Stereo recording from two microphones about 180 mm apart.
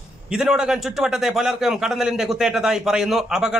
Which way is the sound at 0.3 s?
5° right (ahead or behind).